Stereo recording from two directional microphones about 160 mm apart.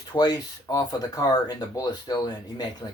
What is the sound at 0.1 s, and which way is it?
Speech, 25° left (ahead or behind).